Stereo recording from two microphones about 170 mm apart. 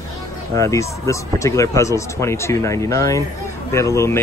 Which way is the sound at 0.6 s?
20° left (ahead or behind).